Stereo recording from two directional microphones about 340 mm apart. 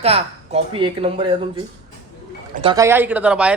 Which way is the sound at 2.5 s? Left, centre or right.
Centre.